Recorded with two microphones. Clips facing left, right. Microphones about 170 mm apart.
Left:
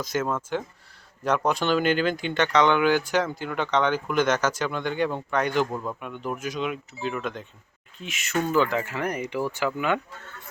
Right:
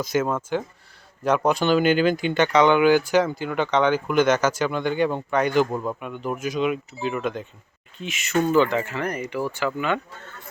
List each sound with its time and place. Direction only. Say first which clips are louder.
0.0 s speech: right 4 dB; 5° right (ahead or behind)
5.7 s speech: right 4 dB; 20° right (ahead or behind)
6.0 s speech: right 3 dB; 5° right (ahead or behind)